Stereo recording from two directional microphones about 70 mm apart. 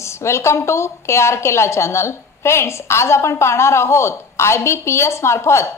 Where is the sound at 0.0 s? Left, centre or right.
Left.